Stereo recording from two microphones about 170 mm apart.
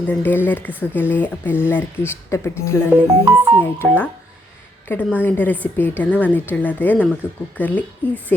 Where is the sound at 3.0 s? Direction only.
15° right (ahead or behind).